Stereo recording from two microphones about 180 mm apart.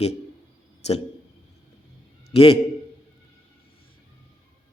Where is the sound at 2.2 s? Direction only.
35° left (ahead or behind).